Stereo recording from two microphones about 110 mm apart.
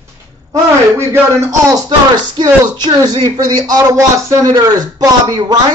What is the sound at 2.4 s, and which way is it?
A man's voice, 40° right (ahead or behind).